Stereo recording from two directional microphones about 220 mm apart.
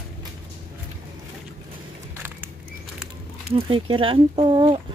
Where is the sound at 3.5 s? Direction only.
25° right (ahead or behind).